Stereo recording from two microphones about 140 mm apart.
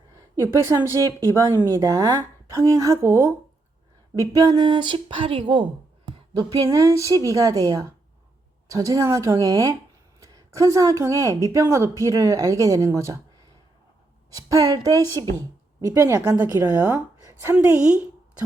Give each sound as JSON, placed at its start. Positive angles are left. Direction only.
{"t": 0.4, "sound": "a woman's voice", "side_deg": -20}
{"t": 6.1, "sound": "a sound", "side_deg": -35}
{"t": 6.7, "sound": "a woman's voice", "side_deg": -25}
{"t": 14.3, "sound": "a woman's voice", "side_deg": -25}